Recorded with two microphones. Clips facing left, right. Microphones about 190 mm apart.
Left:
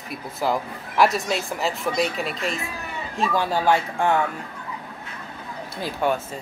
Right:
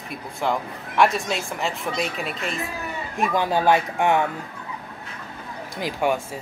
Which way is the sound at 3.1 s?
15° right (ahead or behind).